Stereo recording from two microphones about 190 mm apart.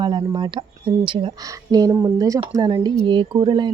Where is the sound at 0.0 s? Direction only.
25° right (ahead or behind).